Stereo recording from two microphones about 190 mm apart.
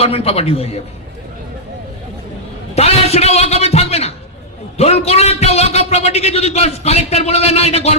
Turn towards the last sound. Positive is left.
turn(degrees=35)  # may be behind; listen again after turning